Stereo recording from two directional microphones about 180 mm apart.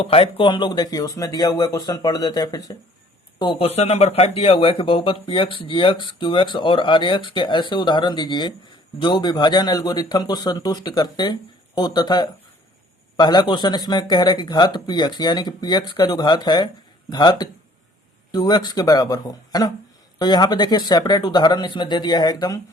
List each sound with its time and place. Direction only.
0.0 s speech: 30° left (ahead or behind)